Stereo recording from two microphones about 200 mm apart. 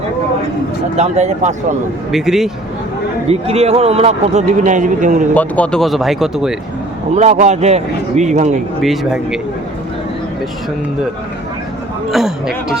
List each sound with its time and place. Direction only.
0.9 s a man's voice: 35° right (ahead or behind)
2.1 s speech: centre (ahead or behind)
3.2 s a man's voice: 30° right (ahead or behind)
5.3 s speech: 10° left (ahead or behind)
7.1 s a man's voice: 35° right (ahead or behind)
8.8 s speech: centre (ahead or behind)
12.1 s speech: centre (ahead or behind)